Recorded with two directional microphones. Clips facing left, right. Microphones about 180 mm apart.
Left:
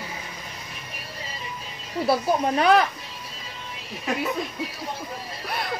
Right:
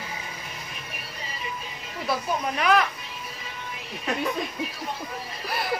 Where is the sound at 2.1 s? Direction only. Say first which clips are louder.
Left 5 dB; 30° left (ahead or behind).